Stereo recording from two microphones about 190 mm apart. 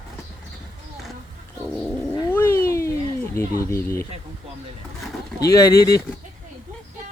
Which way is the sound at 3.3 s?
15° left (ahead or behind).